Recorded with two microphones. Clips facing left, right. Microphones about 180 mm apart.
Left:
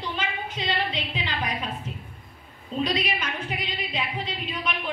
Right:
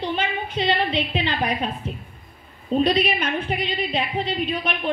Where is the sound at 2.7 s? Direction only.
60° right (ahead or behind).